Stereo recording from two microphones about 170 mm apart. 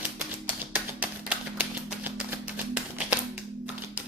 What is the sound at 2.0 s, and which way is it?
Music, 5° right (ahead or behind).